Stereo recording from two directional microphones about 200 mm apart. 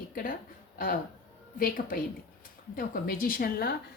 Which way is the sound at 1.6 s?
45° left (ahead or behind).